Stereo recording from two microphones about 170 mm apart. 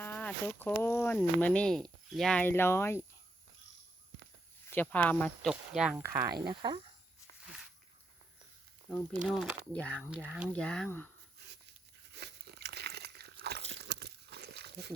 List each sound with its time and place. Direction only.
0.0 s speech: 10° left (ahead or behind)
4.7 s speech: 10° left (ahead or behind)
6.0 s speech: 15° right (ahead or behind)
8.9 s speech: 5° right (ahead or behind)
10.1 s speech: 5° right (ahead or behind)
10.5 s speech: 5° left (ahead or behind)
12.1 s crunch: 75° right (ahead or behind)
13.8 s a sound: 75° right (ahead or behind)